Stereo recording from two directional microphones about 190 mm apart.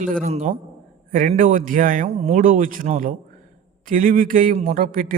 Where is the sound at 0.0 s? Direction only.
45° right (ahead or behind).